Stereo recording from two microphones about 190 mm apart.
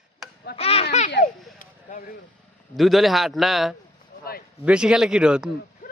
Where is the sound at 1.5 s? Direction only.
45° left (ahead or behind).